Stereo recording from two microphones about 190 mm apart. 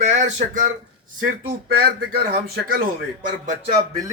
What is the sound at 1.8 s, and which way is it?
Speech, 50° right (ahead or behind).